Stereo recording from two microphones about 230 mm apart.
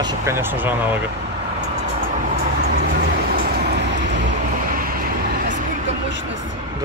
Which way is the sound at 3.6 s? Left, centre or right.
Right.